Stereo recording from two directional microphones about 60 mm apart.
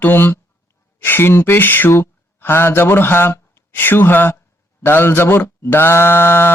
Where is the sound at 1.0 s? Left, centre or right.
Left.